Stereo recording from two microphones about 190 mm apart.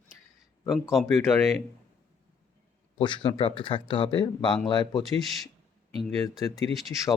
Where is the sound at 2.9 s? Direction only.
25° left (ahead or behind).